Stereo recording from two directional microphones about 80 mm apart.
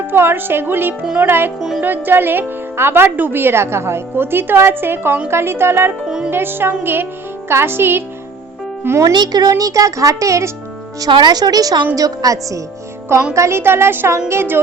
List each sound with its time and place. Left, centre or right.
0.1 s speech: right
6.1 s music: centre
6.3 s speech: right
9.1 s speech: right
11.1 s speech: right